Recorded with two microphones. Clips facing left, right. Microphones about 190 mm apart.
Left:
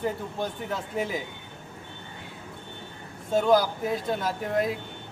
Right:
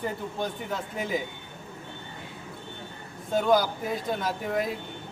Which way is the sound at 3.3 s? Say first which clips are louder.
Left 2 dB; centre (ahead or behind).